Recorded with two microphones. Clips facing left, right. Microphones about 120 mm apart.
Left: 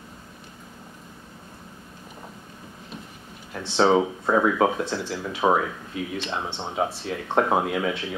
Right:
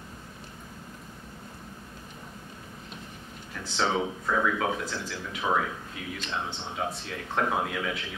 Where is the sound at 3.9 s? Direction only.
40° left (ahead or behind).